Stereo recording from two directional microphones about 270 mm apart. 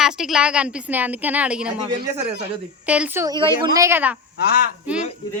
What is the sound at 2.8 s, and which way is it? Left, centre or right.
Speech, centre.